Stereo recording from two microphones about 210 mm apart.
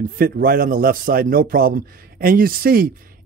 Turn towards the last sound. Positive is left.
turn(degrees=-45)  # may be behind; listen again after turning